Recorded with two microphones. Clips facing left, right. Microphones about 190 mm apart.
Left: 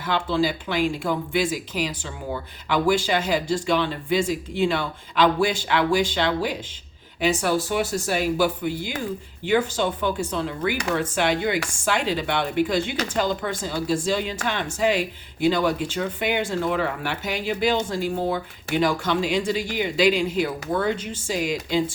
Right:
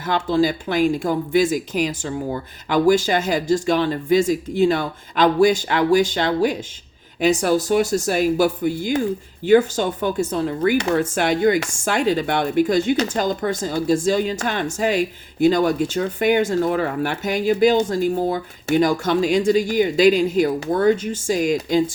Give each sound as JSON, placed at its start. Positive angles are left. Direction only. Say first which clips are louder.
{"t": 0.0, "sound": "speech", "louder": "right 4 dB", "side_deg": -45}